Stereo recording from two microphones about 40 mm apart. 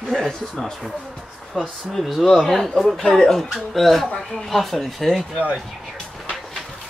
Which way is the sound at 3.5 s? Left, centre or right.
Centre.